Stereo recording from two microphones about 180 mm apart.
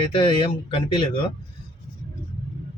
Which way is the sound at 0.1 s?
25° left (ahead or behind).